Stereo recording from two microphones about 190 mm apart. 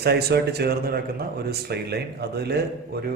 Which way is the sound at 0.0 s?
60° right (ahead or behind).